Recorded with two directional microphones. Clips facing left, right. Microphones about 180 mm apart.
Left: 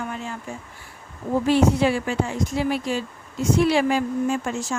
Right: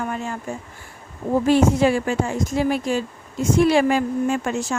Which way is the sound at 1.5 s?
45° right (ahead or behind).